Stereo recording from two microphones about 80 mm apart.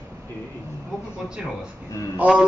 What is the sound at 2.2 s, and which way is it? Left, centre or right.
Speech, centre.